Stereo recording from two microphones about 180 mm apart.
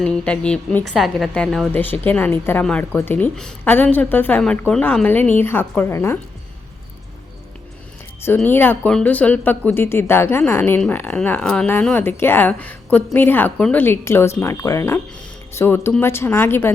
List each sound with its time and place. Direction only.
0.0 s a woman's voice: 5° left (ahead or behind)
8.4 s speech: 10° left (ahead or behind)